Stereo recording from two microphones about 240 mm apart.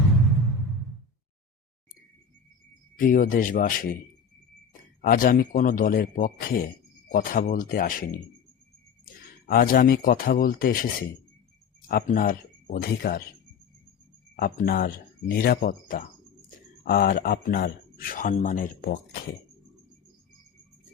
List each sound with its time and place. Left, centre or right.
2.9 s speech: left
5.0 s speech: left
9.5 s speech: left
11.9 s speech: left
14.3 s speech: left